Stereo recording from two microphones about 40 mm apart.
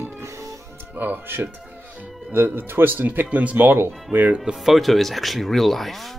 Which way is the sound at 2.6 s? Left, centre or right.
Right.